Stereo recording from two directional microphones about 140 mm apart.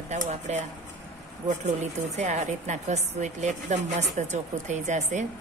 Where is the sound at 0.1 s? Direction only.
55° right (ahead or behind).